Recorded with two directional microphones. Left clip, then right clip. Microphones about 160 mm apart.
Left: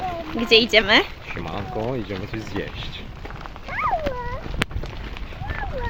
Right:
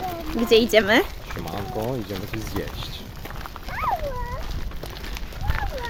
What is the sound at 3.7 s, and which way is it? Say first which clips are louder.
Dog: left 2 dB; 35° left (ahead or behind).